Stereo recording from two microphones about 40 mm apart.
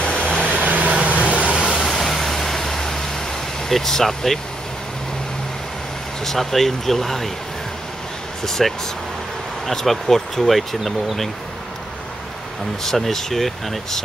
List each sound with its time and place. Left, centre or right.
0.0 s vehicle: left
0.7 s vehicle: right
1.8 s vehicle: centre
3.6 s speech: centre
6.2 s speech: centre
8.5 s speech: centre
12.8 s speech: centre